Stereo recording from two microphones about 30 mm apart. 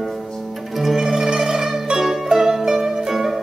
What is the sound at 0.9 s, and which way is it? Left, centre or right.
Zither, centre.